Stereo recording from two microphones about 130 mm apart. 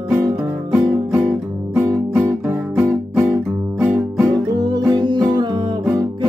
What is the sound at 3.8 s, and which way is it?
Music, 15° right (ahead or behind).